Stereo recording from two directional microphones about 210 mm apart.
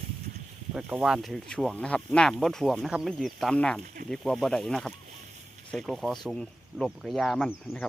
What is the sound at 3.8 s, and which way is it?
Speech, 40° right (ahead or behind).